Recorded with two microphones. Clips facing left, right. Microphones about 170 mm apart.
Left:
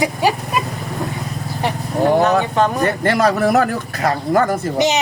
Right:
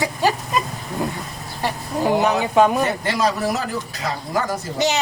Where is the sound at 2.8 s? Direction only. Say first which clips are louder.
Left 5 dB; 55° left (ahead or behind).